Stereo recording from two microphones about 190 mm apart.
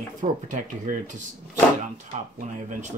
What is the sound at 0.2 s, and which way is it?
Speech, 45° right (ahead or behind).